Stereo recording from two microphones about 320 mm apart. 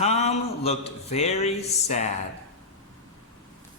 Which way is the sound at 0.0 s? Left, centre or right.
Centre.